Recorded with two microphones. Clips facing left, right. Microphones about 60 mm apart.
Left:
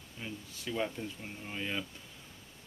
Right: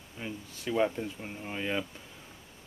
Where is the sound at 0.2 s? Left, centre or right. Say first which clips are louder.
Right 4 dB; centre.